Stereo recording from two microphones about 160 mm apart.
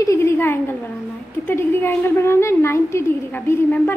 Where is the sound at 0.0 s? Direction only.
20° left (ahead or behind).